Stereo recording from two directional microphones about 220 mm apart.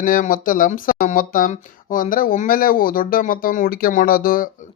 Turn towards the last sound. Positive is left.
turn(degrees=40)  # may be behind; listen again after turning